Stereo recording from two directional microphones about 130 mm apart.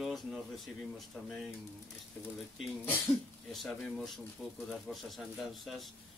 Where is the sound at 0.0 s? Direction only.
Centre (ahead or behind).